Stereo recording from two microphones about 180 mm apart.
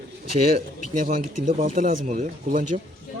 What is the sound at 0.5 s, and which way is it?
Speech, 45° right (ahead or behind).